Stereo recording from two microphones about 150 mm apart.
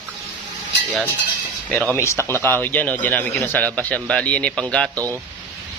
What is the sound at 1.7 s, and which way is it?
A man's voice, 10° left (ahead or behind).